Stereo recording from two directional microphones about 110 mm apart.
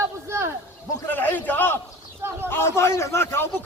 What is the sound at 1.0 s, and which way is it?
A man's voice, 15° left (ahead or behind).